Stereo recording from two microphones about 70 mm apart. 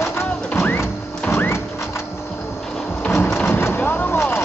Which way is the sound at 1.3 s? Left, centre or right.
Left.